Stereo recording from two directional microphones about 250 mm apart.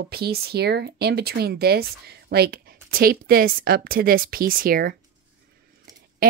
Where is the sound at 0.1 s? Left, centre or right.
Right.